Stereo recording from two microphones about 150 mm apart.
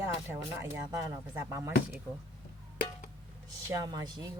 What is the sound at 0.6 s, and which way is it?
Speech, 25° right (ahead or behind).